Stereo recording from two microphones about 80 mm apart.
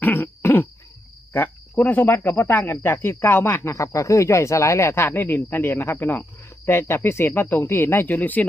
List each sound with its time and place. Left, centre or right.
0.0 s throat clearing: left
1.3 s speech: left